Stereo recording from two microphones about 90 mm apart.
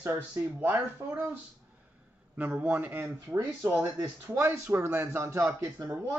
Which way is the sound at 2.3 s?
20° right (ahead or behind).